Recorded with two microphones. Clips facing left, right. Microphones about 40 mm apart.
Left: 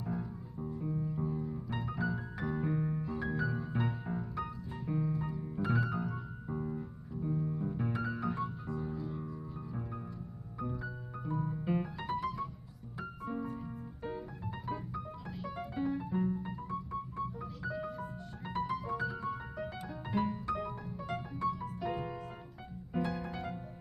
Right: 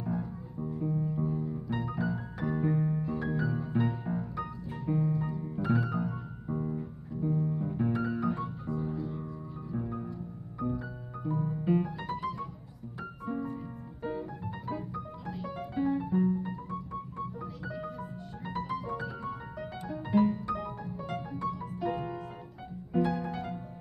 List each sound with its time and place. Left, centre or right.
0.0 s music: centre
15.2 s piano: centre
22.9 s music: centre